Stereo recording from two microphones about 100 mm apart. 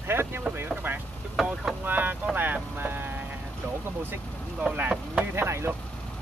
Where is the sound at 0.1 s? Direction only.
25° right (ahead or behind).